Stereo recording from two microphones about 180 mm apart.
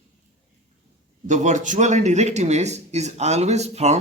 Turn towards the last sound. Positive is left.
turn(degrees=-40)  # may be behind; listen again after turning